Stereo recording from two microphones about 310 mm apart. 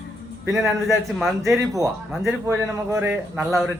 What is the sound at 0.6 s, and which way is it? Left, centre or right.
Speech, centre.